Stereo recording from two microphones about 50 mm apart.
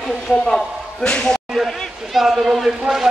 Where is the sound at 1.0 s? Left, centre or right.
Centre.